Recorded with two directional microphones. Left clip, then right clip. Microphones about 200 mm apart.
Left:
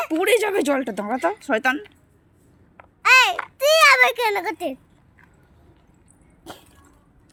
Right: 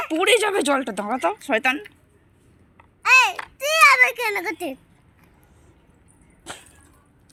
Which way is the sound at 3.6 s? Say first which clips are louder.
Left 1 dB; 45° left (ahead or behind).